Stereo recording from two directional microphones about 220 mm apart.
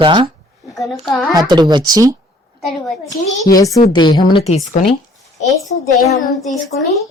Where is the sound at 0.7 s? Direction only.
Centre (ahead or behind).